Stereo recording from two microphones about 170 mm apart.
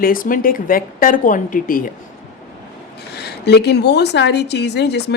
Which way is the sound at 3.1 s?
75° left (ahead or behind).